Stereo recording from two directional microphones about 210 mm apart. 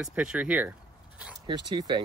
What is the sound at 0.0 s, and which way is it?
Speech, 5° right (ahead or behind).